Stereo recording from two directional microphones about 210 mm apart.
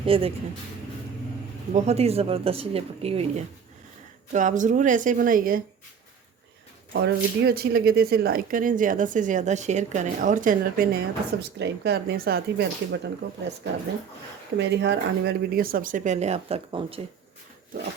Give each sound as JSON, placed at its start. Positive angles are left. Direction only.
{"t": 0.0, "sound": "speech", "side_deg": -25}
{"t": 1.7, "sound": "speech", "side_deg": -30}
{"t": 6.9, "sound": "speech", "side_deg": -50}
{"t": 14.6, "sound": "speech", "side_deg": -55}